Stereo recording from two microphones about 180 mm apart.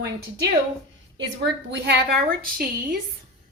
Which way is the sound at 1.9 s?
60° right (ahead or behind).